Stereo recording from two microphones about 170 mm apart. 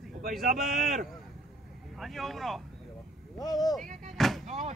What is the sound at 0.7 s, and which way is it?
Speech, 50° right (ahead or behind).